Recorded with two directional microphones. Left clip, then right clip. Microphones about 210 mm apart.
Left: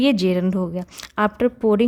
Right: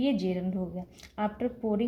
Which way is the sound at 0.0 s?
45° left (ahead or behind).